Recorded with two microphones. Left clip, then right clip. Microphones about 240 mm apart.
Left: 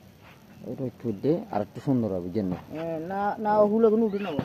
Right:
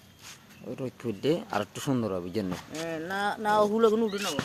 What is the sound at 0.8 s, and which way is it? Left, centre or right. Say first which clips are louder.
Speech: left 1 dB; right.